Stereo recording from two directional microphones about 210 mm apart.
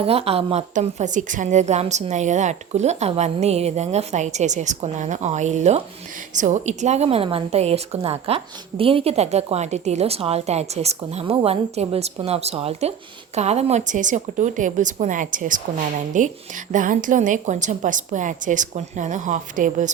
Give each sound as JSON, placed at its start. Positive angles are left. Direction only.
{"t": 0.0, "sound": "a woman's voice", "side_deg": -30}